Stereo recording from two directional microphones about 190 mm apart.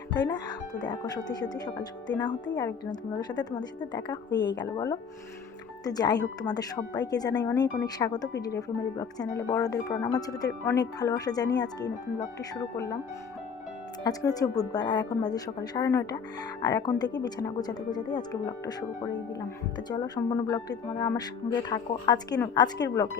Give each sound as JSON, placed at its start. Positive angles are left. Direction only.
{"t": 0.1, "sound": "speech", "side_deg": 20}
{"t": 14.0, "sound": "speech", "side_deg": 20}